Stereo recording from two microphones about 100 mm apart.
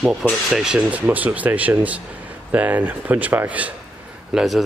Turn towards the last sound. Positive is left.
turn(degrees=0)  # may be behind; listen again after turning